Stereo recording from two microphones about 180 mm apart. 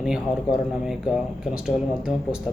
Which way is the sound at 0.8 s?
5° right (ahead or behind).